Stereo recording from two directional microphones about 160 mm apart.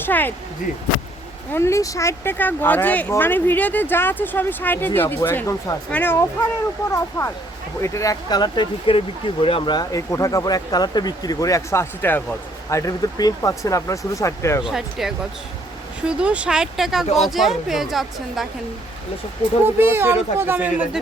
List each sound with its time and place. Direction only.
0.0 s speech: 10° left (ahead or behind)
1.5 s speech: 15° left (ahead or behind)
14.6 s speech: centre (ahead or behind)
19.6 s speech: 15° right (ahead or behind)